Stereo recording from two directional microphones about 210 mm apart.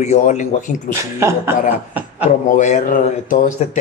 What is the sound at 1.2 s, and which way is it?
Speech, 10° right (ahead or behind).